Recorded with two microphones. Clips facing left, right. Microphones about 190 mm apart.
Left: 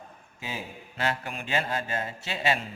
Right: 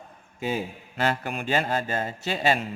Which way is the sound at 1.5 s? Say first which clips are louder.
Right 4 dB; 40° right (ahead or behind).